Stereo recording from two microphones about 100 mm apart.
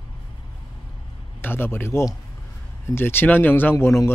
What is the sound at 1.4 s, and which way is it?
Speech, 20° left (ahead or behind).